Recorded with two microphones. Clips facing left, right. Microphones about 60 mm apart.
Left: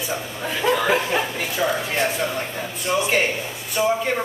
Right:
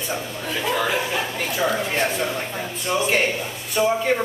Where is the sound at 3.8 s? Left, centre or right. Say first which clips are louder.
Right 1 dB; centre.